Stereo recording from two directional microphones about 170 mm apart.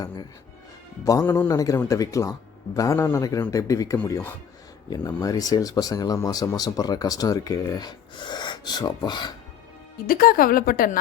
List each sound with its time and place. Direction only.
1.0 s speech: 20° left (ahead or behind)
10.1 s a woman's voice: 60° left (ahead or behind)